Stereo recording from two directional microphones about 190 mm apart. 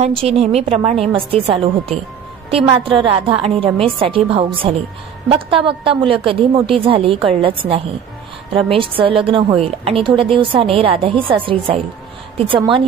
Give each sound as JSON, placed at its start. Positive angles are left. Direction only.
{"t": 0.0, "sound": "a woman's voice", "side_deg": -30}